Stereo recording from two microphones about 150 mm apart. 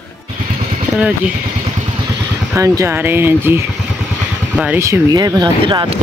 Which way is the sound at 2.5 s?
20° right (ahead or behind).